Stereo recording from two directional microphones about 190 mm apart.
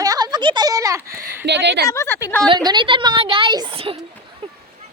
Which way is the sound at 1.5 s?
65° right (ahead or behind).